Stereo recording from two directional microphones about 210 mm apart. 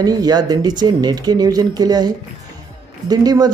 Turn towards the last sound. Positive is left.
turn(degrees=-20)  # may be behind; listen again after turning